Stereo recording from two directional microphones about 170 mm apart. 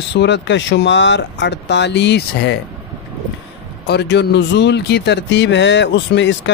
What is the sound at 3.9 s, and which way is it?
Speech, 85° left.